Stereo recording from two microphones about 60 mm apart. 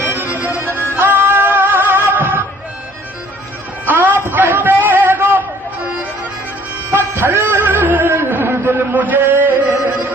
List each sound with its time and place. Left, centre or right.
0.0 s music: right
0.3 s music: right
0.7 s music: left
0.9 s music: right
3.8 s music: right
4.4 s a sound: right
6.9 s music: right